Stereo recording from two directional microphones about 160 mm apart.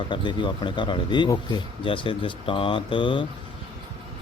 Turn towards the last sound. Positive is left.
turn(degrees=30)  # may be behind; listen again after turning